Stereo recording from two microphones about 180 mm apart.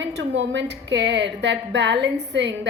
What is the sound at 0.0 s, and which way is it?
A woman's voice, 85° right.